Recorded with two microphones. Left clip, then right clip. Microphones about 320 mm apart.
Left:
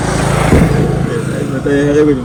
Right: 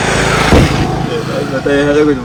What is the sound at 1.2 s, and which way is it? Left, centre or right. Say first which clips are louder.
Speech: right 2 dB; centre.